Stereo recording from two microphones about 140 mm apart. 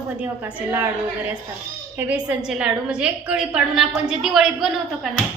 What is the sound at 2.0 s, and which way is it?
A woman's voice, 10° right (ahead or behind).